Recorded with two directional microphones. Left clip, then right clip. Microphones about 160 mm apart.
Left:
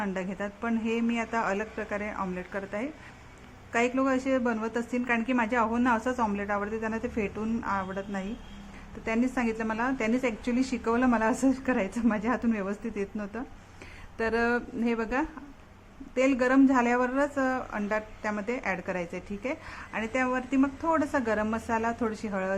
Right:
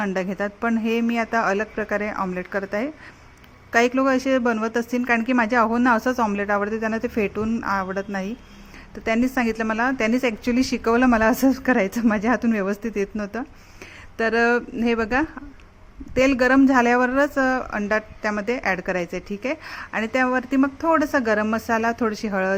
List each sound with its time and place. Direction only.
0.0 s speech: 30° right (ahead or behind)